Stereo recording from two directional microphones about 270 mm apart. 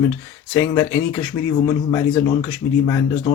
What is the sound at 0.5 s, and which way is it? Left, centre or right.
Speech, centre.